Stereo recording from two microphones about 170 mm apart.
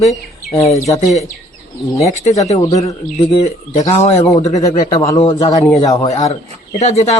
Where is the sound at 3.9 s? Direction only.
40° left (ahead or behind).